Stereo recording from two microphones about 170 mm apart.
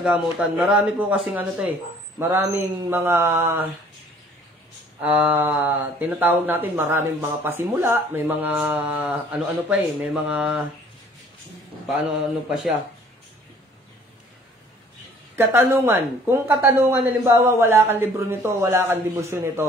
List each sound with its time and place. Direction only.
0.0 s speech: 5° right (ahead or behind)
5.0 s speech: 10° right (ahead or behind)
15.3 s speech: 15° right (ahead or behind)